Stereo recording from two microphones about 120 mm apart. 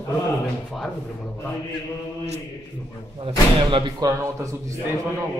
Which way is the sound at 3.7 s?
40° right (ahead or behind).